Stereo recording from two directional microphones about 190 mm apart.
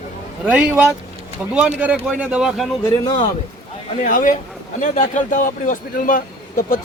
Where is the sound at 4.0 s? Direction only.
45° left (ahead or behind).